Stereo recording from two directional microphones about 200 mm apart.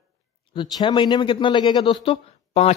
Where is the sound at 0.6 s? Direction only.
25° left (ahead or behind).